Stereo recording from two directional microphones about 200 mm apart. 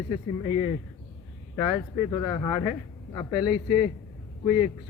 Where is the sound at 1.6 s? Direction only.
25° left (ahead or behind).